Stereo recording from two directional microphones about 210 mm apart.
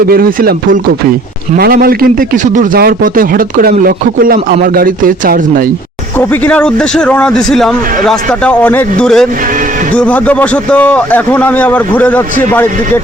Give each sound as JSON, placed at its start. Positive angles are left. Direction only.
{"t": 0.1, "sound": "a man's voice", "side_deg": -45}
{"t": 6.1, "sound": "a man's voice", "side_deg": 10}